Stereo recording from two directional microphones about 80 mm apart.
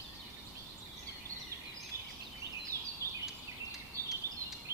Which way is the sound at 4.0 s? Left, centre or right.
Right.